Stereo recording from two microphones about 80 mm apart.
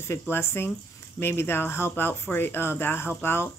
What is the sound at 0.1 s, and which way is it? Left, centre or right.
Speech, left.